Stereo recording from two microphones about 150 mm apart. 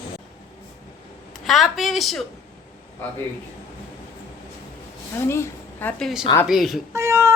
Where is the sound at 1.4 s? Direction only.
Centre (ahead or behind).